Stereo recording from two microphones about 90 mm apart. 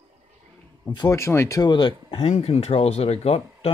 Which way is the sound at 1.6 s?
60° left (ahead or behind).